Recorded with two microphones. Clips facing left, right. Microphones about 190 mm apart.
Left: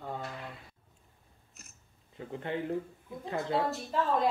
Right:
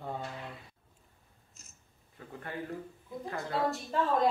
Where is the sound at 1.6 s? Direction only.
65° left (ahead or behind).